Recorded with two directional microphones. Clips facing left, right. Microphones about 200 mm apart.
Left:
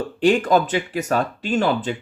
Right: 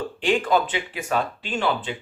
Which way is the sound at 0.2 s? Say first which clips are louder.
Left 5 dB; 45° left (ahead or behind).